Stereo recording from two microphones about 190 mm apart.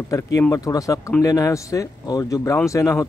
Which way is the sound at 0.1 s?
15° left (ahead or behind).